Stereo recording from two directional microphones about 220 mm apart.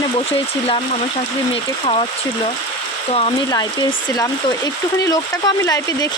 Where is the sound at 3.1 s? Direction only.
20° left (ahead or behind).